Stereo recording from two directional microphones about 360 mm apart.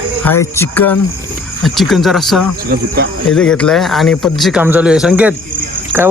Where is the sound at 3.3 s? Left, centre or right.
Centre.